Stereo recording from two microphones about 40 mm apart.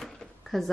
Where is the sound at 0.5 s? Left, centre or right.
Centre.